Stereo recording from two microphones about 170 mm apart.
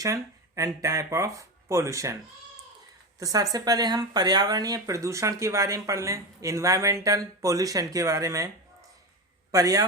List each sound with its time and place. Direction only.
0.0 s speech: 20° right (ahead or behind)
3.2 s speech: 20° right (ahead or behind)
9.5 s speech: 20° right (ahead or behind)